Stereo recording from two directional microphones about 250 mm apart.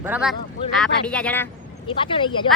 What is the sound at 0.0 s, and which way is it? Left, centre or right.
Speech, centre.